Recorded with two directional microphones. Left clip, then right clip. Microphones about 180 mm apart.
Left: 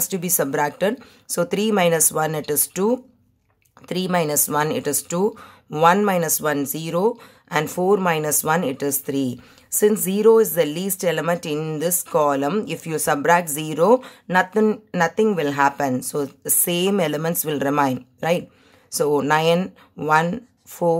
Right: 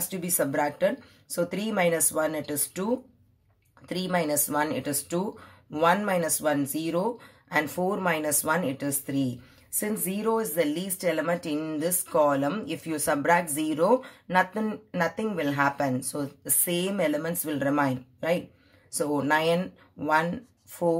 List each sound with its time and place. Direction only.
0.1 s speech: 45° left (ahead or behind)